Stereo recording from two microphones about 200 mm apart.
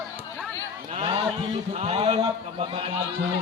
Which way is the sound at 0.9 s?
30° right (ahead or behind).